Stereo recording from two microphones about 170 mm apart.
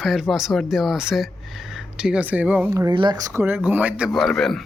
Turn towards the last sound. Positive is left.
turn(degrees=0)  # may be behind; listen again after turning